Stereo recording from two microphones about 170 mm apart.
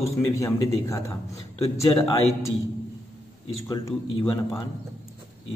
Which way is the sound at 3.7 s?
25° left (ahead or behind).